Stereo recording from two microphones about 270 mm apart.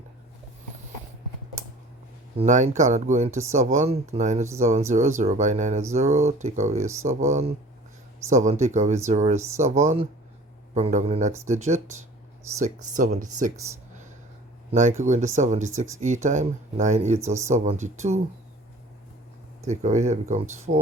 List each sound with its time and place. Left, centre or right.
2.4 s speech: right
14.7 s speech: right
19.6 s speech: right